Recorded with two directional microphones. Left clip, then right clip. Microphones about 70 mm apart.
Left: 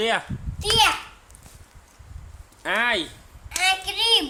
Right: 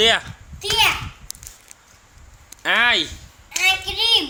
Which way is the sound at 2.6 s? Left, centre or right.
Right.